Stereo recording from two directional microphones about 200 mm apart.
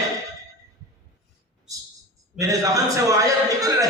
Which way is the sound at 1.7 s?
15° right (ahead or behind).